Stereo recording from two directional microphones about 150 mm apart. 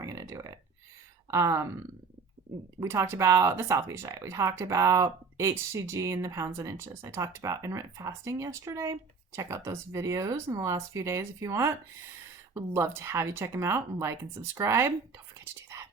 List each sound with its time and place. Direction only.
0.0 s a sound: 20° right (ahead or behind)
1.3 s speech: 20° right (ahead or behind)
2.8 s speech: 20° right (ahead or behind)